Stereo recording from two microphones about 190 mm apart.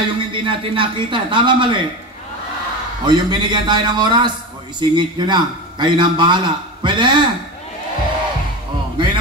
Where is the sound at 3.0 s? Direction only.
20° right (ahead or behind).